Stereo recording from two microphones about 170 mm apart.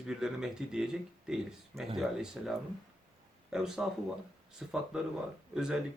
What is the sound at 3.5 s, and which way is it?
Speech, 5° right (ahead or behind).